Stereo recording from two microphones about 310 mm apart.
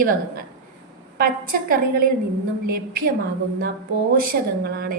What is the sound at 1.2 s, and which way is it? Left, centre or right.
Speech, right.